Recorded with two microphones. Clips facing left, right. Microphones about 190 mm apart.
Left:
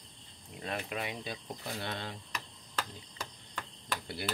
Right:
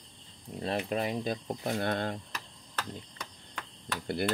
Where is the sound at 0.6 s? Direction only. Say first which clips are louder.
Right 6 dB; 35° right (ahead or behind).